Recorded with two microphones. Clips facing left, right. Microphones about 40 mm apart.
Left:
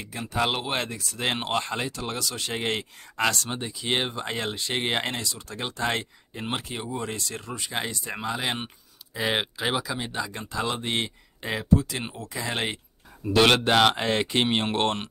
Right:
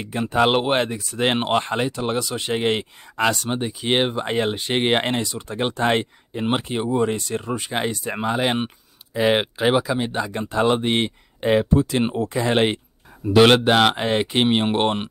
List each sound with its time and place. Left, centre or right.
0.0 s speech: right
9.1 s speech: right
13.3 s speech: centre